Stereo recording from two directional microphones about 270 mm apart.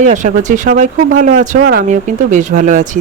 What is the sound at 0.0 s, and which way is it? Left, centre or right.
Speech, right.